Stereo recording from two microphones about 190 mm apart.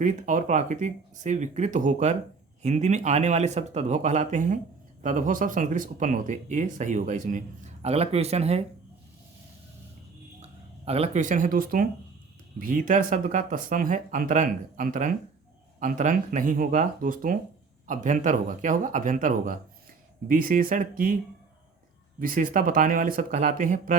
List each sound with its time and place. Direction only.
0.0 s speech: 40° right (ahead or behind)
10.4 s speech: 30° right (ahead or behind)
22.2 s speech: 45° right (ahead or behind)